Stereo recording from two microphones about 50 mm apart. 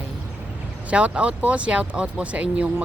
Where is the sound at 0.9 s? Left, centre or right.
Right.